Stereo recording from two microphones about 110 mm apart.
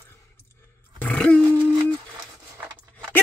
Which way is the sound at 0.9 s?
10° left (ahead or behind).